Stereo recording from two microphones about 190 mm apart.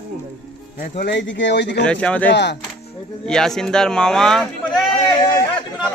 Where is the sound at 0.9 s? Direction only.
65° left (ahead or behind).